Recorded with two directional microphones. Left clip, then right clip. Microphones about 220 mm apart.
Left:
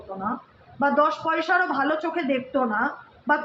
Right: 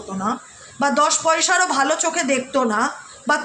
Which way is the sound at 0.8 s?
50° right (ahead or behind).